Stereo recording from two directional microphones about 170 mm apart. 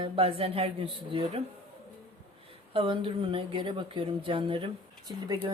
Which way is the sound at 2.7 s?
30° right (ahead or behind).